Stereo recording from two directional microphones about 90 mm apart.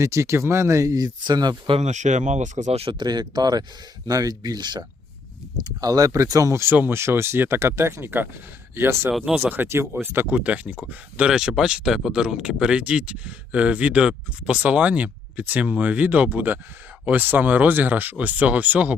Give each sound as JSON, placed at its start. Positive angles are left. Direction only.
{"t": 0.0, "sound": "speech", "side_deg": -35}
{"t": 1.2, "sound": "speech", "side_deg": -50}
{"t": 2.6, "sound": "speech", "side_deg": -90}
{"t": 3.0, "sound": "speech", "side_deg": -50}
{"t": 9.1, "sound": "speech", "side_deg": -5}
{"t": 9.9, "sound": "speech", "side_deg": -25}